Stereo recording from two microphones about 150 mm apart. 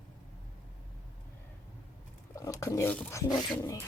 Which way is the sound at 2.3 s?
20° left (ahead or behind).